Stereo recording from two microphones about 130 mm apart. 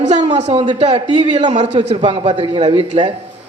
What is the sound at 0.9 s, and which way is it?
Speech, 35° right (ahead or behind).